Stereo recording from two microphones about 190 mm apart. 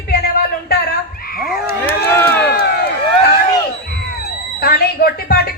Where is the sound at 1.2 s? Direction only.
50° left (ahead or behind).